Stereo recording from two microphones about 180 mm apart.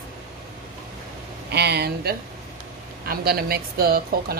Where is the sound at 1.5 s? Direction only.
65° right (ahead or behind).